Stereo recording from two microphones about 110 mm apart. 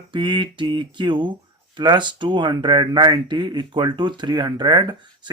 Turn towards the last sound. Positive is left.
turn(degrees=-40)  # may be behind; listen again after turning